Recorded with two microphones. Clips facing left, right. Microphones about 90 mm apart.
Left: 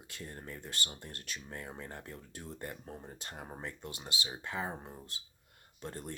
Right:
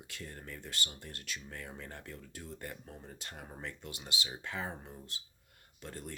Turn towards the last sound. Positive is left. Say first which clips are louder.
# left 2 dB
turn(degrees=30)  # may be behind; listen again after turning